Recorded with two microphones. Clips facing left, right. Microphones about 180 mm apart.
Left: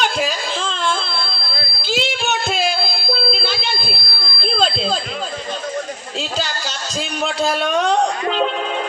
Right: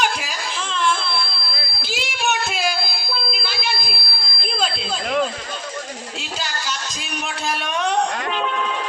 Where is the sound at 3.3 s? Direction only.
30° left (ahead or behind).